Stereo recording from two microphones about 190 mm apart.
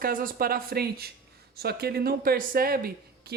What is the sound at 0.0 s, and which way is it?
Speech, 45° right (ahead or behind).